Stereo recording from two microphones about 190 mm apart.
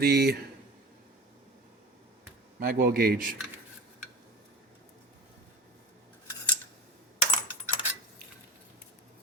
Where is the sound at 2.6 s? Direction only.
50° right (ahead or behind).